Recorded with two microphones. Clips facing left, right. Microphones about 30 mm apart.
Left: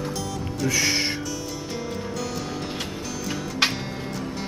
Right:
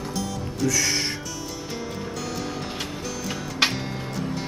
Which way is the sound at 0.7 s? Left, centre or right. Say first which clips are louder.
Left 2 dB; left.